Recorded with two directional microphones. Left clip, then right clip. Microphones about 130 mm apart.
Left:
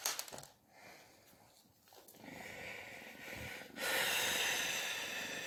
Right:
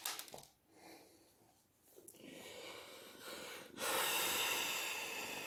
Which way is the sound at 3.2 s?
40° right (ahead or behind).